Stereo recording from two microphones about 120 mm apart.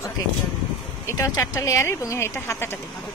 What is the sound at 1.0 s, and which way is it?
Speech, 30° left (ahead or behind).